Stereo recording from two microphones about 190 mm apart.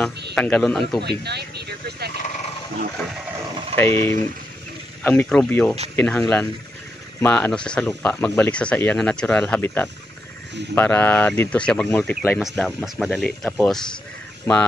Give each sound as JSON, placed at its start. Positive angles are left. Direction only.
{"t": 0.3, "sound": "speech", "side_deg": 5}
{"t": 1.0, "sound": "speech", "side_deg": -60}
{"t": 3.7, "sound": "speech", "side_deg": 10}